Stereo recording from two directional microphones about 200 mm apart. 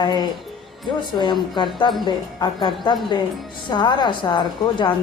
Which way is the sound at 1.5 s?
25° left (ahead or behind).